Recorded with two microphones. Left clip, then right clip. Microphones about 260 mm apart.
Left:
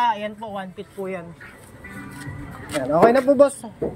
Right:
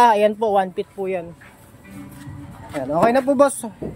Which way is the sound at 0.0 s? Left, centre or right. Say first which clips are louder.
Right 8 dB; right.